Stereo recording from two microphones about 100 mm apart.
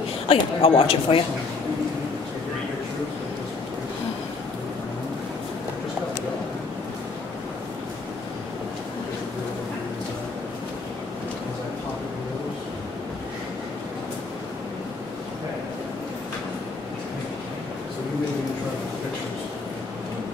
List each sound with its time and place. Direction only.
0.3 s speech: 65° left (ahead or behind)